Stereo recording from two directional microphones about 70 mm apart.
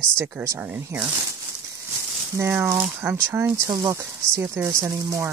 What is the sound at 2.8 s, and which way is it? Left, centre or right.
Speech, right.